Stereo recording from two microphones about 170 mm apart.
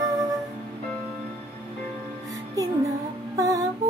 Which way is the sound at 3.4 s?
20° right (ahead or behind).